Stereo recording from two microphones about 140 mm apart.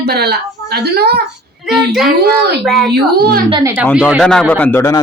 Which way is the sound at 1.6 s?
Centre (ahead or behind).